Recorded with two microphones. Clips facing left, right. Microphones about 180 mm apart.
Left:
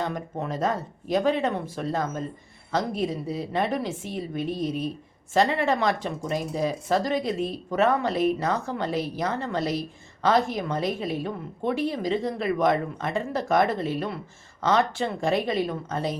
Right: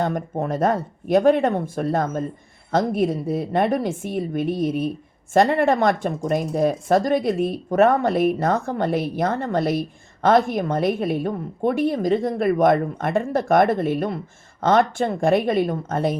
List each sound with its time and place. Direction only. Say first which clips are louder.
0.0 s a woman's voice: right 6 dB; 50° right (ahead or behind)